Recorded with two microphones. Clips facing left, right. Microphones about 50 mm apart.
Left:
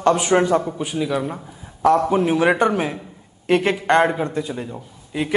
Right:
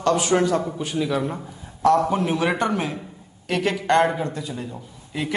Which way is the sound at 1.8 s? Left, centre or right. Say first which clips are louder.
Left 2 dB; left.